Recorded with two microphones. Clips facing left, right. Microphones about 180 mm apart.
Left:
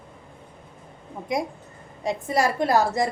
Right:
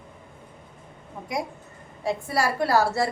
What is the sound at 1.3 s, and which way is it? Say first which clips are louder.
A woman's voice: left 3 dB; 20° left (ahead or behind).